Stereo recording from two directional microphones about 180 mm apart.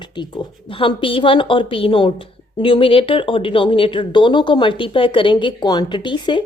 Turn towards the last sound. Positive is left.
turn(degrees=25)  # may be behind; listen again after turning